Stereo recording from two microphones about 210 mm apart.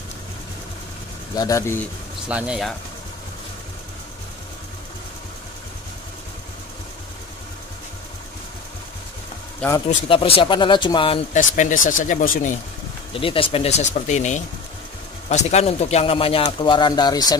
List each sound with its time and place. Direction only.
1.3 s speech: 15° left (ahead or behind)
2.2 s speech: 5° right (ahead or behind)
9.8 s speech: 25° left (ahead or behind)
11.3 s speech: 40° left (ahead or behind)
13.1 s speech: 25° left (ahead or behind)